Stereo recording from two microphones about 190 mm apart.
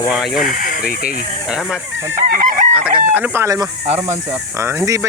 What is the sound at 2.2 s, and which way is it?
Chicken, 40° right (ahead or behind).